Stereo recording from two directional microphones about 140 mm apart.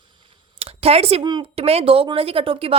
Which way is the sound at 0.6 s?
45° right (ahead or behind).